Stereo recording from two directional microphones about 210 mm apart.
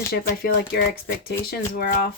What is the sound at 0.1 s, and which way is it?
Speech, 50° left (ahead or behind).